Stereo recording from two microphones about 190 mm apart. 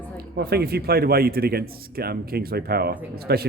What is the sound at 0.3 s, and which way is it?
A man's voice, 55° right (ahead or behind).